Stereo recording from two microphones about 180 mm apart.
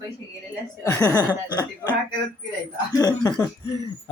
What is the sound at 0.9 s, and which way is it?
Speech, 20° left (ahead or behind).